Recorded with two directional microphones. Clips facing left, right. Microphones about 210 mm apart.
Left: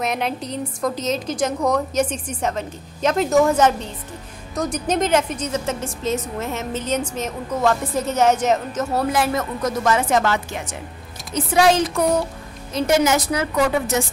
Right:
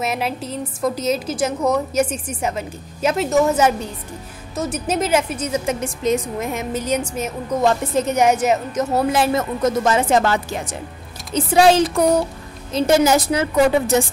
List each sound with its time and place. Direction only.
0.0 s a woman's voice: 5° right (ahead or behind)
8.9 s speech: 25° right (ahead or behind)